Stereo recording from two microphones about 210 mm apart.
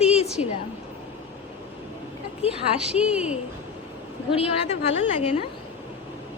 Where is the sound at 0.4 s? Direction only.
30° left (ahead or behind).